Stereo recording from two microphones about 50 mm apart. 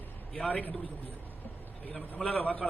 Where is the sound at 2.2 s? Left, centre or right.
Left.